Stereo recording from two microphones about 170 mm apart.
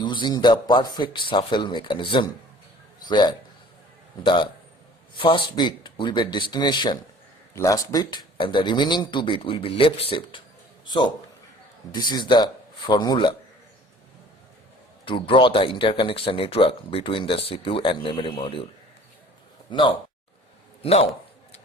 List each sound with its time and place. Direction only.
0.0 s a man's voice: 25° left (ahead or behind)
15.0 s speech: 30° left (ahead or behind)
19.7 s speech: 25° left (ahead or behind)